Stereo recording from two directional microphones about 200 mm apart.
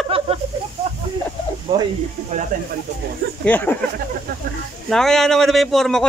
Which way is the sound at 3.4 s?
10° left (ahead or behind).